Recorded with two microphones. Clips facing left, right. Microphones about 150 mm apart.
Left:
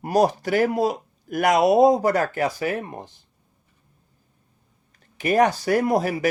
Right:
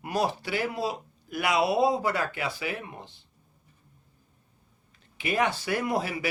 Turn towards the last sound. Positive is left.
turn(degrees=40)  # may be behind; listen again after turning